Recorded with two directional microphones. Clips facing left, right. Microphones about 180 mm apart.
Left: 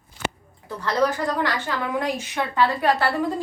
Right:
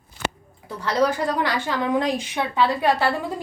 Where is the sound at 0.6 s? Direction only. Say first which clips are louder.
Right 1 dB; 10° right (ahead or behind).